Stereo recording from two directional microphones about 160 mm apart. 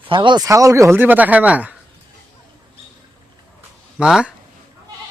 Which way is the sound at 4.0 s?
5° right (ahead or behind).